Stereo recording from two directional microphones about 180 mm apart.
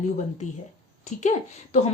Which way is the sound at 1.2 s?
40° left (ahead or behind).